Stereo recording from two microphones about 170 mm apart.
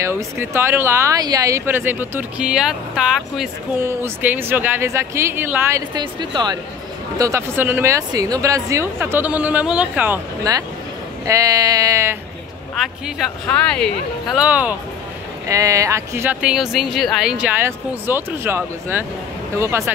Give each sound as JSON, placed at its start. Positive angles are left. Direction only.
{"t": 0.0, "sound": "speech", "side_deg": -15}
{"t": 11.2, "sound": "sheep", "side_deg": -20}
{"t": 12.7, "sound": "speech", "side_deg": 0}